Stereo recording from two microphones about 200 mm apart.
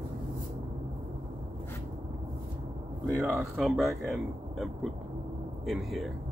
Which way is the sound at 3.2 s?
Centre (ahead or behind).